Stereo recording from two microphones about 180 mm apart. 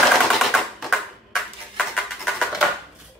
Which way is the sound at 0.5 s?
Centre (ahead or behind).